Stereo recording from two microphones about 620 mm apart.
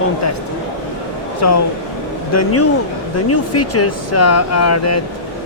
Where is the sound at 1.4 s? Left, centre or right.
Left.